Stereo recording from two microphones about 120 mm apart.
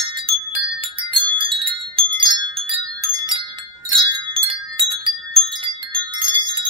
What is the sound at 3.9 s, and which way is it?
Wind chime, 40° right (ahead or behind).